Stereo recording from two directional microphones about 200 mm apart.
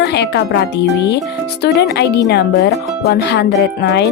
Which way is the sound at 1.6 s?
55° left (ahead or behind).